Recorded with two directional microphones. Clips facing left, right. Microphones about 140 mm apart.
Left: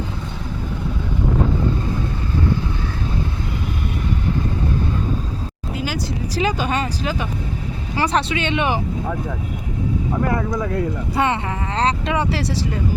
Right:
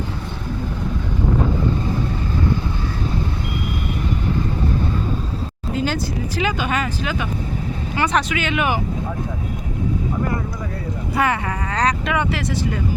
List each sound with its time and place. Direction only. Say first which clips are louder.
5.7 s speech: right 4 dB; 10° left (ahead or behind)
6.3 s speech: left 2 dB; 35° left (ahead or behind)
11.1 s speech: right 2 dB; 25° left (ahead or behind)